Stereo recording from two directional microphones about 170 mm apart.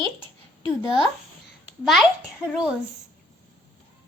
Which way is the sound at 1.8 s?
Centre (ahead or behind).